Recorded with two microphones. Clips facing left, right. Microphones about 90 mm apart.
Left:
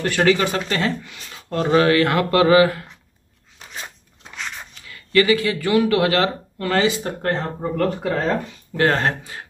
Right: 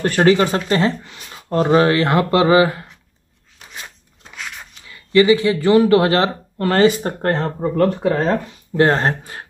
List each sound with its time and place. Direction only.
0.0 s speech: 35° right (ahead or behind)
4.3 s a sound: 5° right (ahead or behind)
4.8 s speech: 20° right (ahead or behind)
6.7 s speech: 45° right (ahead or behind)
8.2 s speech: 25° right (ahead or behind)
8.8 s speech: 35° right (ahead or behind)